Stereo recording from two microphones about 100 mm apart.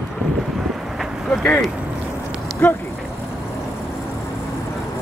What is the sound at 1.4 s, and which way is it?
Speech, 5° left (ahead or behind).